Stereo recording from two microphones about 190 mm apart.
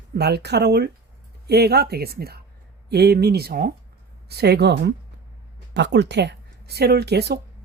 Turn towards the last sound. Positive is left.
turn(degrees=-60)  # may be behind; listen again after turning